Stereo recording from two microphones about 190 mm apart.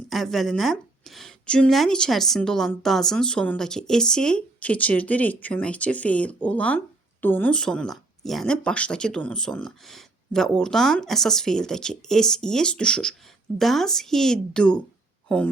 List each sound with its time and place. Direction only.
0.1 s a woman's voice: centre (ahead or behind)